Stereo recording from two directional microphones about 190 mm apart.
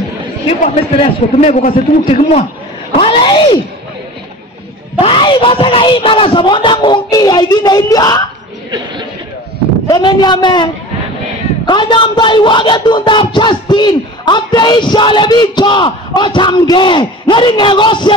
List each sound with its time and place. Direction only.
0.5 s a man's voice: 30° left (ahead or behind)
5.0 s speech: 25° left (ahead or behind)
9.8 s speech: 20° left (ahead or behind)